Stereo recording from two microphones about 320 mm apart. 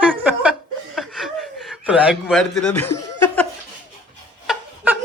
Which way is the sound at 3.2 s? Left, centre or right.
Centre.